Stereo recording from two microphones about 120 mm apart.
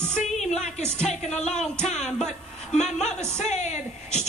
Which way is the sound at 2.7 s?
70° left (ahead or behind).